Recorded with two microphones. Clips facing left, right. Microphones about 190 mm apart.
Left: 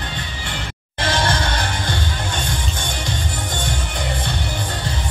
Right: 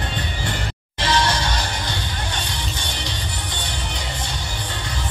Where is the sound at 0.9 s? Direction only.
50° left (ahead or behind).